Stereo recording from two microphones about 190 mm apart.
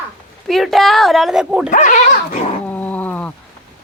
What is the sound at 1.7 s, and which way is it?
Speech, 40° left (ahead or behind).